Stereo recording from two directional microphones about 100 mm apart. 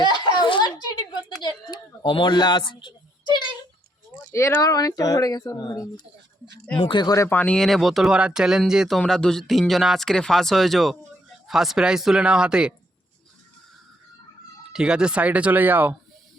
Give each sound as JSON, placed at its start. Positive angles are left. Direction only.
{"t": 0.0, "sound": "a sound", "side_deg": 50}
{"t": 1.4, "sound": "a child's voice", "side_deg": 45}
{"t": 4.5, "sound": "speech", "side_deg": 35}
{"t": 6.7, "sound": "speech", "side_deg": 55}
{"t": 7.3, "sound": "speech", "side_deg": 15}
{"t": 9.0, "sound": "speech", "side_deg": 5}
{"t": 14.7, "sound": "speech", "side_deg": -10}